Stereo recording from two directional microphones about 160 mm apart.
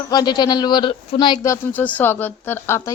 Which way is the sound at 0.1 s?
25° left (ahead or behind).